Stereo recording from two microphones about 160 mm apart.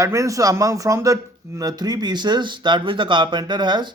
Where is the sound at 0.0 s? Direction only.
20° right (ahead or behind).